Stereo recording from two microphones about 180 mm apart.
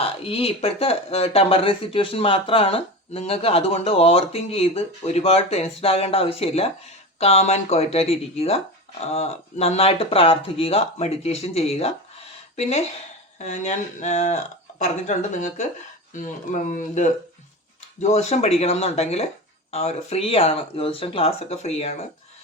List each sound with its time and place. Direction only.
0.0 s speech: 30° left (ahead or behind)